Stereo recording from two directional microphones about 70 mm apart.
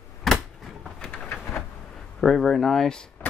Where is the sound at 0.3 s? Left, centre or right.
Centre.